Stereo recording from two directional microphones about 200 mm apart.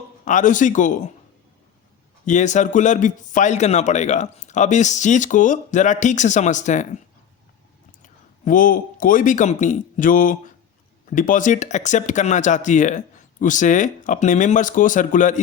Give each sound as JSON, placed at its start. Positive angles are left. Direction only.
{"t": 0.3, "sound": "a man's voice", "side_deg": 40}
{"t": 2.2, "sound": "a man's voice", "side_deg": 35}
{"t": 8.0, "sound": "a man's voice", "side_deg": 40}